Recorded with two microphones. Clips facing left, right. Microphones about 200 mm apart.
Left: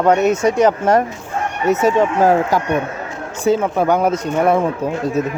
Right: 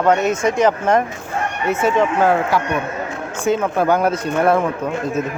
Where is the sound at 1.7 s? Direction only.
40° left (ahead or behind).